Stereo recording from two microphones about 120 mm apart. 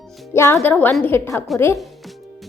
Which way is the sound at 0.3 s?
20° left (ahead or behind).